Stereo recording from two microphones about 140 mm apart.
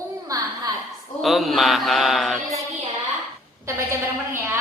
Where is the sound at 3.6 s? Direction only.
15° right (ahead or behind).